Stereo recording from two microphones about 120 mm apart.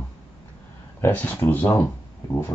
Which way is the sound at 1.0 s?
15° left (ahead or behind).